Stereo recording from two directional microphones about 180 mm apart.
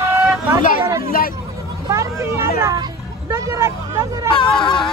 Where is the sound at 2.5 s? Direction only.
20° right (ahead or behind).